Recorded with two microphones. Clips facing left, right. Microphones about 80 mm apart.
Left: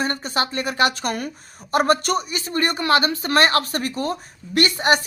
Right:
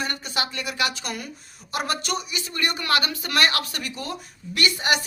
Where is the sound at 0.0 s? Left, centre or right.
Left.